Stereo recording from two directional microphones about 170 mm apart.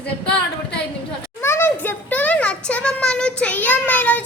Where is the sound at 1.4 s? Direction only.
15° left (ahead or behind).